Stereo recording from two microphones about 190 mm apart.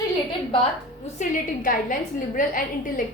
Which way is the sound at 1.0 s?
45° left (ahead or behind).